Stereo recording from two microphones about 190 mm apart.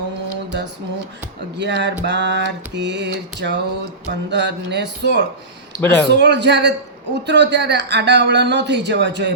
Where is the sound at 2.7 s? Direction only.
65° right (ahead or behind).